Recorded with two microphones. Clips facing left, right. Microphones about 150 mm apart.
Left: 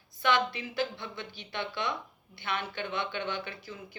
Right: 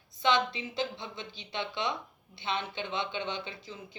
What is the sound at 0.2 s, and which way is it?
Speech, 20° right (ahead or behind).